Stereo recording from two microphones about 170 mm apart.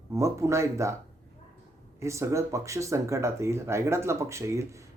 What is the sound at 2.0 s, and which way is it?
Speech, 15° right (ahead or behind).